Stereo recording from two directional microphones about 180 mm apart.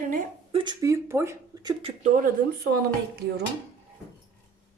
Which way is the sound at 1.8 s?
40° right (ahead or behind).